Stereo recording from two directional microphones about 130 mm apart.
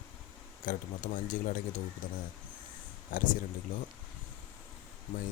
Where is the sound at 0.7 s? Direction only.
90° left.